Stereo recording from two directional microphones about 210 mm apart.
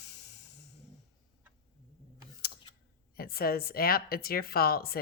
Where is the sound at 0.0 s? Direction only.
55° left (ahead or behind).